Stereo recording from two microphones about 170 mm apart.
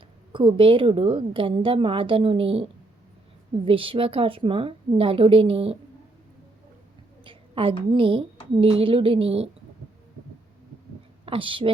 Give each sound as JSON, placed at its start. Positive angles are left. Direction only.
{"t": 0.3, "sound": "a woman's voice", "side_deg": -30}
{"t": 7.3, "sound": "a woman's voice", "side_deg": -30}
{"t": 11.3, "sound": "a woman's voice", "side_deg": -30}